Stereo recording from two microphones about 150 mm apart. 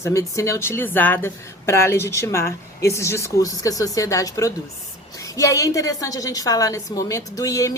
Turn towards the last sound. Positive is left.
turn(degrees=20)  # may be behind; listen again after turning